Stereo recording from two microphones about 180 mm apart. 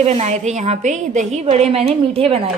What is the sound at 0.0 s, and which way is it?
A woman's voice, 40° right (ahead or behind).